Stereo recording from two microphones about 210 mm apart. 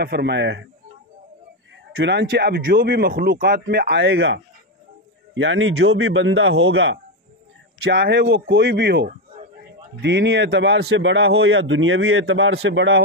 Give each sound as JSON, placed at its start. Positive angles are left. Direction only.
{"t": 0.0, "sound": "a man's voice", "side_deg": -50}
{"t": 2.0, "sound": "a man's voice", "side_deg": -55}